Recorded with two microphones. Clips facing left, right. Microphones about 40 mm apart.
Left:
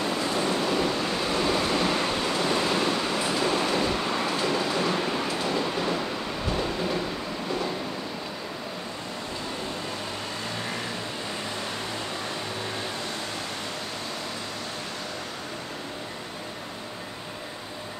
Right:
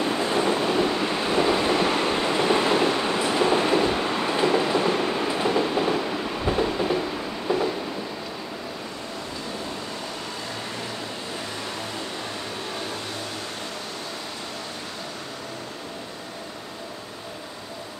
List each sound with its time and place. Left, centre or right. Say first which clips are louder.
0.0 s waves: right 3 dB; right
5.0 s train: right 4 dB; centre